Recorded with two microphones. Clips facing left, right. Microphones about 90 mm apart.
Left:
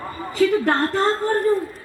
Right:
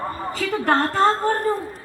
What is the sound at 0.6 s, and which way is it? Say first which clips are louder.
Speech: right 1 dB; 40° right (ahead or behind).